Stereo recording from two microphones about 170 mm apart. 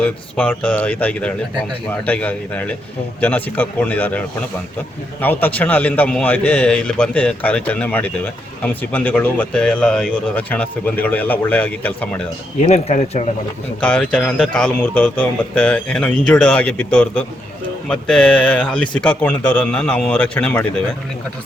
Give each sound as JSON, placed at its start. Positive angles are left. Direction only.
{"t": 0.0, "sound": "a man's voice", "side_deg": 10}
{"t": 5.2, "sound": "a man's voice", "side_deg": 10}
{"t": 12.6, "sound": "speech", "side_deg": 45}
{"t": 13.8, "sound": "a man's voice", "side_deg": 10}